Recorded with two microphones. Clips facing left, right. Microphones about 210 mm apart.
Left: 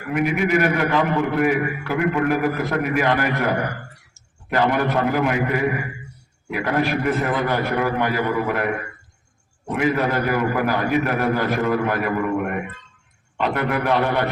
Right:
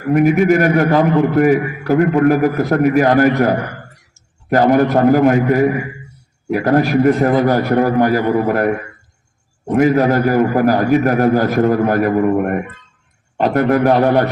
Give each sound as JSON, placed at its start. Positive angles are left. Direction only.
{"t": 0.1, "sound": "a man's voice", "side_deg": -45}
{"t": 9.7, "sound": "a man's voice", "side_deg": -40}